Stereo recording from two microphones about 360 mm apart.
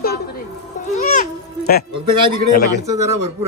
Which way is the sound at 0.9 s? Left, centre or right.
Left.